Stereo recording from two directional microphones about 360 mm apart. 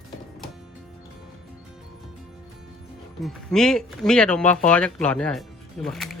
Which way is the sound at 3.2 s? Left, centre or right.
Centre.